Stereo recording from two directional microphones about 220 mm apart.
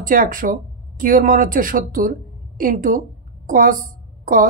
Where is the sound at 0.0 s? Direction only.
40° right (ahead or behind).